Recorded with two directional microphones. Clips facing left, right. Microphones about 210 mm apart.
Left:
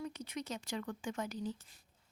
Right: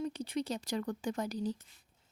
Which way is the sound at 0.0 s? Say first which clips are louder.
Right 7 dB; 30° right (ahead or behind).